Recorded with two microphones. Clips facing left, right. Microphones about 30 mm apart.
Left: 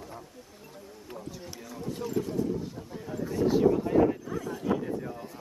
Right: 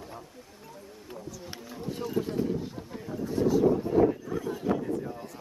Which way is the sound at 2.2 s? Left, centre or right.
Right.